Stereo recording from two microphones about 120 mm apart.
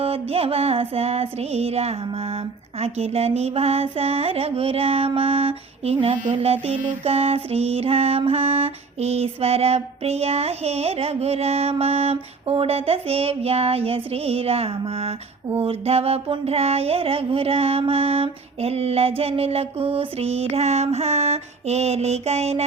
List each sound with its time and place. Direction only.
0.0 s mantra: 55° right (ahead or behind)